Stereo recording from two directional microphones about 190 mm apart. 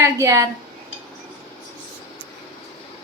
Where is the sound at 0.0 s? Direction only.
15° right (ahead or behind).